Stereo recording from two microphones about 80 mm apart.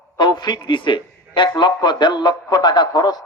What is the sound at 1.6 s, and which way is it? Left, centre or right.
A man's voice, left.